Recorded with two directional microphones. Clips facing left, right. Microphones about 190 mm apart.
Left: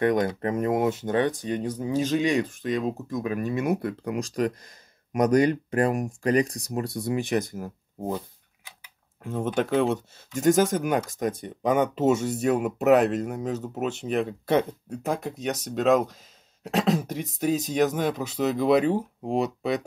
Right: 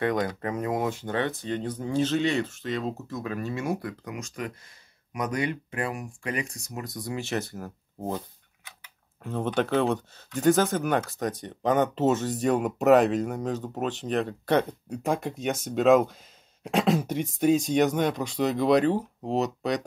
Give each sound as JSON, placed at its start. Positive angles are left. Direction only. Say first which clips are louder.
{"t": 0.0, "sound": "speech", "louder": "left 4 dB", "side_deg": 20}
{"t": 9.2, "sound": "speech", "louder": "left 1 dB", "side_deg": 5}